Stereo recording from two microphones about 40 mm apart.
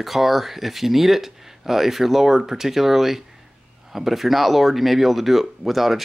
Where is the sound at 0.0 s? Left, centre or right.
Centre.